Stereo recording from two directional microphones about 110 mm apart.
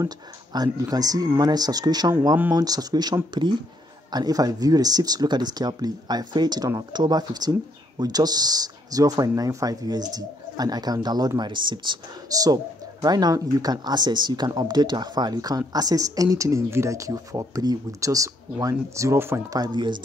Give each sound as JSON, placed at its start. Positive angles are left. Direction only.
{"t": 0.0, "sound": "speech", "side_deg": -40}
{"t": 19.5, "sound": "speech", "side_deg": -40}